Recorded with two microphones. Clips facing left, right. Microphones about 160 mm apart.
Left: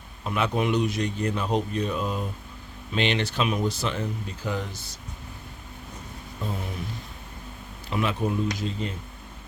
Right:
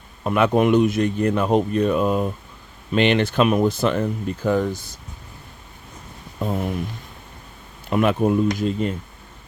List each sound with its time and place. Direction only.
0.3 s speech: 55° right (ahead or behind)
7.9 s speech: 55° right (ahead or behind)